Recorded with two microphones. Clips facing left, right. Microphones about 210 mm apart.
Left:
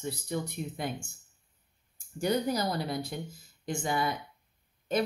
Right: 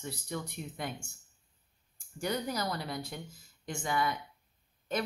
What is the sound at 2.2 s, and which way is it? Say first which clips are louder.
Speech: left 5 dB; 30° left (ahead or behind).